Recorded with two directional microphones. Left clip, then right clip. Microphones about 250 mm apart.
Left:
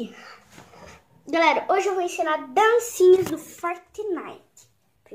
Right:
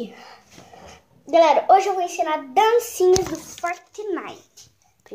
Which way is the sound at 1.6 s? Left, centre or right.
Centre.